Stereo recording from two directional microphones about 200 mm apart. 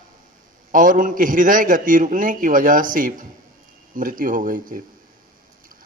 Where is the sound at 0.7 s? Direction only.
40° right (ahead or behind).